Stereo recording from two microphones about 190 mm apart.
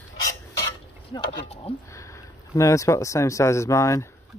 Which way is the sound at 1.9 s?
15° left (ahead or behind).